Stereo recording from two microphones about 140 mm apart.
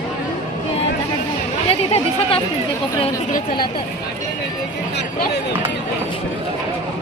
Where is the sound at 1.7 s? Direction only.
45° left (ahead or behind).